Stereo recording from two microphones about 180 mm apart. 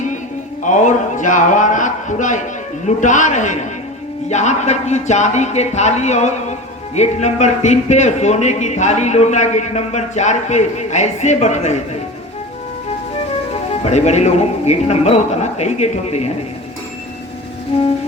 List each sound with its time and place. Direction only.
0.6 s a man's voice: 45° left (ahead or behind)
13.5 s speech: 35° left (ahead or behind)